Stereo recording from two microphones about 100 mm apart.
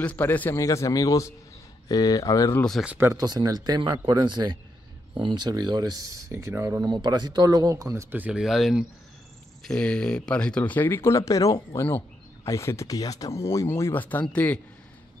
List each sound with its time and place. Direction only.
0.0 s speech: 15° left (ahead or behind)
0.6 s speech: 30° left (ahead or behind)
3.0 s speech: 35° right (ahead or behind)
6.3 s speech: 30° right (ahead or behind)
6.9 s speech: 45° right (ahead or behind); by 8.2 s 25° right (ahead or behind)
8.2 s speech: 5° right (ahead or behind)
9.6 s speech: 10° left (ahead or behind)